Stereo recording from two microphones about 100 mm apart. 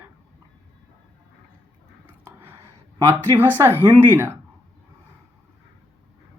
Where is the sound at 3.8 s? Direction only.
25° right (ahead or behind).